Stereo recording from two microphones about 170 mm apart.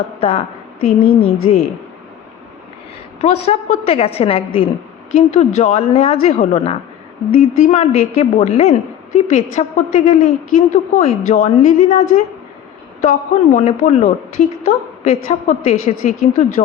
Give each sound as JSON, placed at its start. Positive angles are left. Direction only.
{"t": 0.2, "sound": "a sound", "side_deg": 35}
{"t": 1.2, "sound": "a woman's voice", "side_deg": 40}
{"t": 3.2, "sound": "a woman's voice", "side_deg": 40}